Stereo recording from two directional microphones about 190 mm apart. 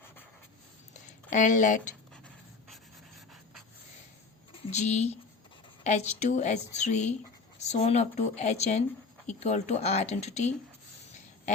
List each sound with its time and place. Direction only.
1.0 s speech: 40° left (ahead or behind)
4.5 s a sound: 35° left (ahead or behind)
5.8 s speech: 35° left (ahead or behind)